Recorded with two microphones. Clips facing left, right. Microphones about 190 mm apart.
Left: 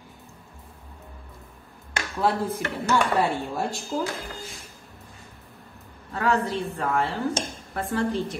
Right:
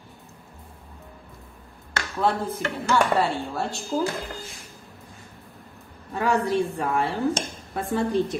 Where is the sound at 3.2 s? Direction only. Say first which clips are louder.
Even; 15° left (ahead or behind).